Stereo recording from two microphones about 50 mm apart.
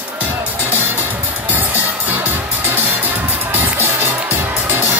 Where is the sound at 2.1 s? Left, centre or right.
Right.